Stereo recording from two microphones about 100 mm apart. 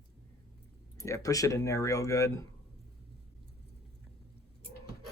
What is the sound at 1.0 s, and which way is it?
Speech, 35° left (ahead or behind).